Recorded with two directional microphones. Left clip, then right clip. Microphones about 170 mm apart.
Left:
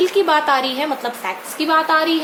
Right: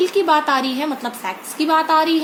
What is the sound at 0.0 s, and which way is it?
A woman's voice, 25° right (ahead or behind).